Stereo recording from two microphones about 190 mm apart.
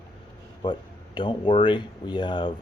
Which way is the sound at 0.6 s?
25° left (ahead or behind).